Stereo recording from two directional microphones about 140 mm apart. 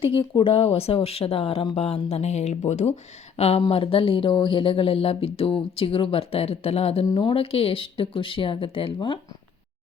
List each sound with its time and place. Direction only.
0.0 s speech: 35° left (ahead or behind)